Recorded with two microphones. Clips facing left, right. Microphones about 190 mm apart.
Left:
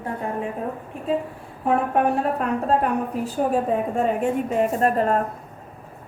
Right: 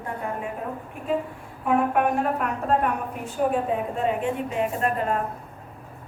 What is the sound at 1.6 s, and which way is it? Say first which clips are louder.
A woman's voice: left 1 dB; 30° left (ahead or behind).